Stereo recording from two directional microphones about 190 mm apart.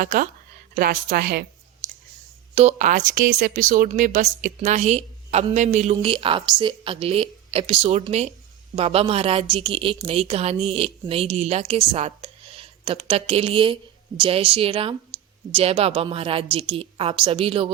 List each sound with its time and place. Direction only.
0.0 s speech: 45° right (ahead or behind)
2.6 s speech: 35° right (ahead or behind)